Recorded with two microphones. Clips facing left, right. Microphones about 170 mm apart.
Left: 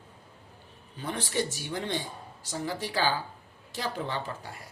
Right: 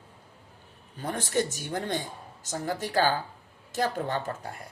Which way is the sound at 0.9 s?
45° right (ahead or behind).